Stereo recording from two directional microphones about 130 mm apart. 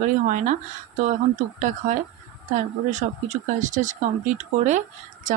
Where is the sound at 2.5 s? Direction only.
65° right (ahead or behind).